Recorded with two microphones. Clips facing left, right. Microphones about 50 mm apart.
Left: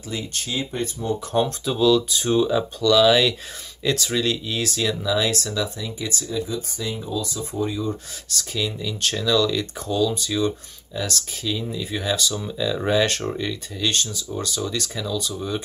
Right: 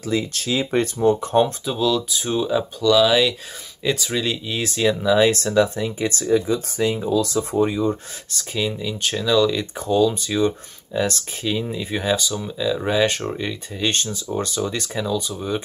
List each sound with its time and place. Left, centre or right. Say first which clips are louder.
0.0 s speech: right 7 dB; right
1.4 s speech: even; centre; by 5.3 s right
5.3 s speech: right 8 dB; right
7.5 s speech: right 5 dB; right
8.4 s speech: right 2 dB; right
12.4 s speech: right 1 dB; centre
13.8 s speech: right 2 dB; right